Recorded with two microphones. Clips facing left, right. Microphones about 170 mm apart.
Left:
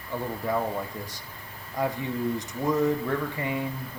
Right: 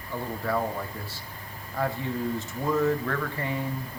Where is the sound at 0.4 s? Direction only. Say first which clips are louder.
Even; 15° left (ahead or behind).